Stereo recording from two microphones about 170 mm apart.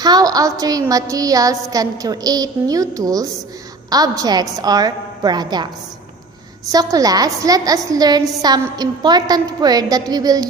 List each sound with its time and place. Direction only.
0.0 s a woman's voice: 20° right (ahead or behind)
6.7 s a woman's voice: 20° right (ahead or behind)